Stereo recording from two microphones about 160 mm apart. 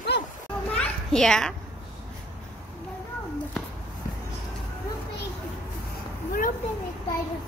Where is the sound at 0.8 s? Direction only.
5° left (ahead or behind).